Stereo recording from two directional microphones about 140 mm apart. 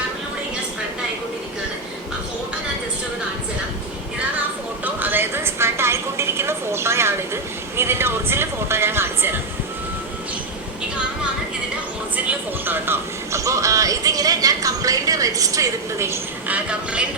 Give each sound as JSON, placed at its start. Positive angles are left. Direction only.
{"t": 4.9, "sound": "a sound", "side_deg": -15}
{"t": 7.8, "sound": "speech", "side_deg": -15}
{"t": 12.6, "sound": "speech", "side_deg": -15}
{"t": 16.6, "sound": "speech", "side_deg": -10}